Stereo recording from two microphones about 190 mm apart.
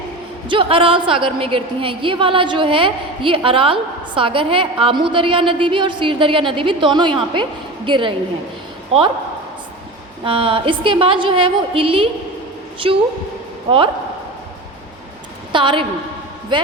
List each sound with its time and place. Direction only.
0.4 s a woman's voice: 25° right (ahead or behind)
10.2 s a woman's voice: 30° right (ahead or behind)
15.5 s a woman's voice: 25° right (ahead or behind)